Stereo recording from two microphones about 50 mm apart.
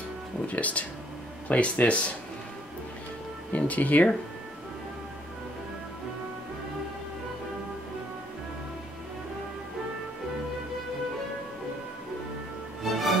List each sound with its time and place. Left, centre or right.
0.5 s speech: left
3.5 s speech: left
12.8 s music: centre